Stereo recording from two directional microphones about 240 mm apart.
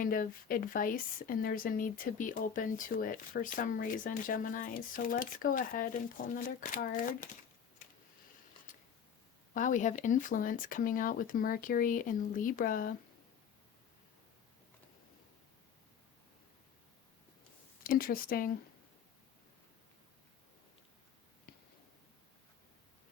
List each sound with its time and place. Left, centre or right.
0.0 s a woman's voice: left
9.6 s a woman's voice: left
17.8 s a woman's voice: left